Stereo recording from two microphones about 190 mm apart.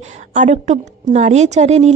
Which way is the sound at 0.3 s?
40° right (ahead or behind).